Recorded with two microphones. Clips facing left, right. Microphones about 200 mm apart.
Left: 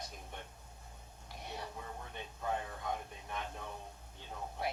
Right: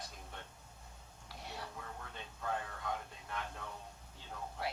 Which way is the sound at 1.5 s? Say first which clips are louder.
Left 3 dB; 15° left (ahead or behind).